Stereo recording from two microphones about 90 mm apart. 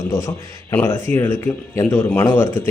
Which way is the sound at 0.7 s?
25° left (ahead or behind).